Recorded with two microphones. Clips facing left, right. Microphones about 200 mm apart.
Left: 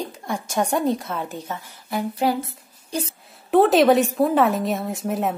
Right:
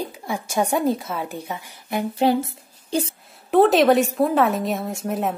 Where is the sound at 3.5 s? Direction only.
Centre (ahead or behind).